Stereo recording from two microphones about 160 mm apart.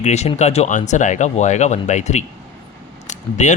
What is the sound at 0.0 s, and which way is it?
Speech, 45° left (ahead or behind).